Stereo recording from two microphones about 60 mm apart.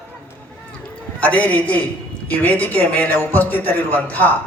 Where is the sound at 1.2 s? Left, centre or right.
Left.